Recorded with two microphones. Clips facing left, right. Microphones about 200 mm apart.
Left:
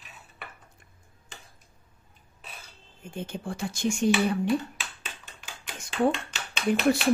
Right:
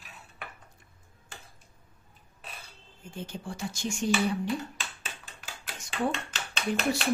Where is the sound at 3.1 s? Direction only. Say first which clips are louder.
Left 4 dB; 55° left (ahead or behind).